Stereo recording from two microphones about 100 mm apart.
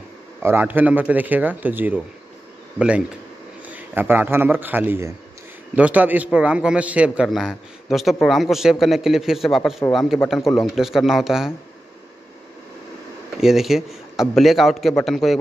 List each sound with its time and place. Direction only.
0.4 s a man's voice: 20° right (ahead or behind)
7.2 s a man's voice: centre (ahead or behind)
13.4 s a man's voice: 5° right (ahead or behind)